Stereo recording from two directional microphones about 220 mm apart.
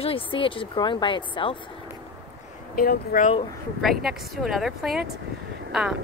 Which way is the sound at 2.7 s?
40° left (ahead or behind).